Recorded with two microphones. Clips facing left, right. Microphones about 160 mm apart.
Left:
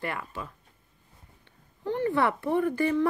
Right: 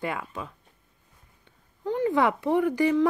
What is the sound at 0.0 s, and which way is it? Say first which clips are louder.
Speech: right 2 dB; 15° right (ahead or behind).